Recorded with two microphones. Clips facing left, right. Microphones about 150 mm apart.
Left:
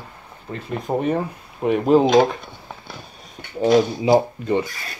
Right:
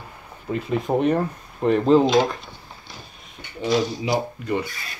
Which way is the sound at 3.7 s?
55° left (ahead or behind).